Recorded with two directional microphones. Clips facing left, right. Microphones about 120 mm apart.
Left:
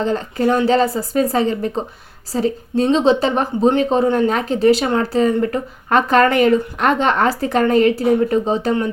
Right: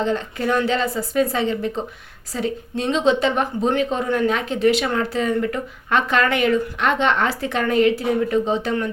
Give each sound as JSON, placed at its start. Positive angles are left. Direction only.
{"t": 0.0, "sound": "speech", "side_deg": 35}